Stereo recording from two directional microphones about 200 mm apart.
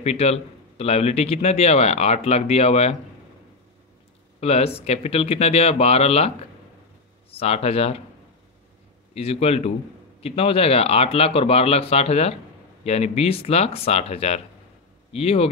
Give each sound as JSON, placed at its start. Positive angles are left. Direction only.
{"t": 0.0, "sound": "a man's voice", "side_deg": 30}
{"t": 4.4, "sound": "a man's voice", "side_deg": 30}
{"t": 9.1, "sound": "a man's voice", "side_deg": 30}